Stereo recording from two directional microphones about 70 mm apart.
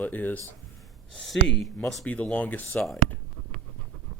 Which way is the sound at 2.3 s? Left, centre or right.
Left.